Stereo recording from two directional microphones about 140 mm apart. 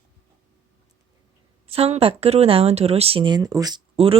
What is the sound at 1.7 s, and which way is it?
Speech, 45° right (ahead or behind).